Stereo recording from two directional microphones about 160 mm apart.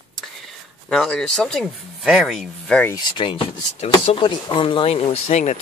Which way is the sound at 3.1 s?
30° left (ahead or behind).